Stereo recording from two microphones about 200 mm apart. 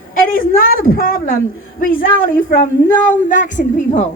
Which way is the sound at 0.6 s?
45° left (ahead or behind).